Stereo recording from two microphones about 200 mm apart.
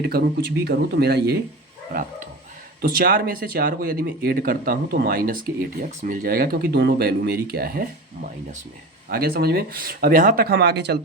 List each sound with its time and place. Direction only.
0.0 s speech: 55° right (ahead or behind)
1.9 s bow-wow: 45° right (ahead or behind)
2.8 s speech: 45° right (ahead or behind)
9.0 s speech: 50° right (ahead or behind)